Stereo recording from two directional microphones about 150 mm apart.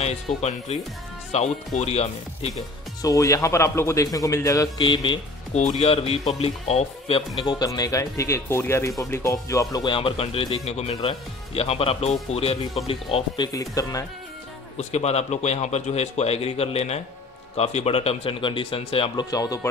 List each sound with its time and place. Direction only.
0.0 s speech: 45° left (ahead or behind)
3.0 s speech: 20° left (ahead or behind)
5.5 s speech: 50° left (ahead or behind)
7.4 s speech: 25° left (ahead or behind)
13.5 s speech: 25° left (ahead or behind)
14.8 s speech: 50° left (ahead or behind)
19.3 s speech: 25° left (ahead or behind)